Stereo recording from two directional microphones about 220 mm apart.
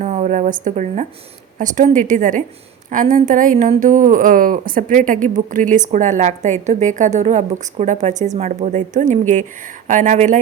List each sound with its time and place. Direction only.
0.0 s a woman's voice: 35° right (ahead or behind)